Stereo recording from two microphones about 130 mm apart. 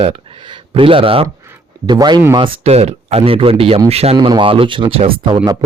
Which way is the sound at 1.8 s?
35° right (ahead or behind).